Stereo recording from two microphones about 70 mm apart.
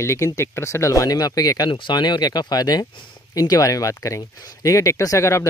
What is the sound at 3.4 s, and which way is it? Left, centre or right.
Speech, left.